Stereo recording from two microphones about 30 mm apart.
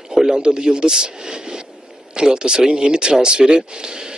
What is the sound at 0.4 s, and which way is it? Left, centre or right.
Speech, right.